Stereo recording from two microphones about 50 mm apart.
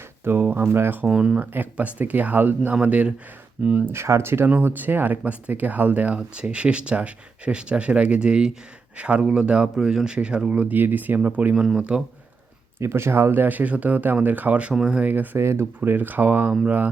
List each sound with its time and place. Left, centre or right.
0.3 s speech: right
1.0 s speech: centre
1.7 s speech: right
3.8 s speech: right
4.4 s speech: right
10.8 s speech: right
11.5 s speech: centre
12.8 s speech: right
14.7 s speech: centre
15.0 s speech: right
15.4 s speech: right
15.8 s speech: right
16.5 s speech: right